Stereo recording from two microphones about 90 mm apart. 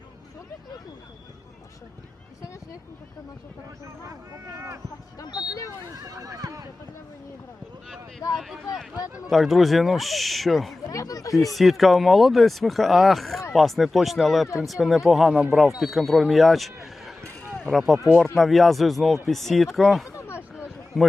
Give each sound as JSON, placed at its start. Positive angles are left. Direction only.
{"t": 4.5, "sound": "speech", "side_deg": -30}
{"t": 5.2, "sound": "speech", "side_deg": 50}
{"t": 5.9, "sound": "speech", "side_deg": -40}
{"t": 8.4, "sound": "speech", "side_deg": 0}
{"t": 10.8, "sound": "speech", "side_deg": 40}
{"t": 11.5, "sound": "speech", "side_deg": 0}
{"t": 20.1, "sound": "a sound", "side_deg": 25}
{"t": 20.9, "sound": "speech", "side_deg": 0}